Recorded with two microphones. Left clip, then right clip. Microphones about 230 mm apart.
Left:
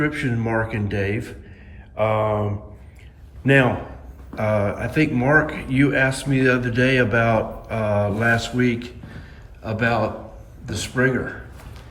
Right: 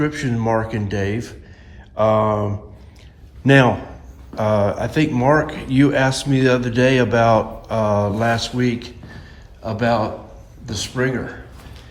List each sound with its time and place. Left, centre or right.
0.0 s speech: centre
2.0 s a sound: right
3.4 s a man's voice: centre